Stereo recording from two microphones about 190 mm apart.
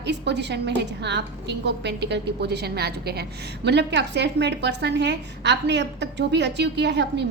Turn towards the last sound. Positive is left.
turn(degrees=-65)  # may be behind; listen again after turning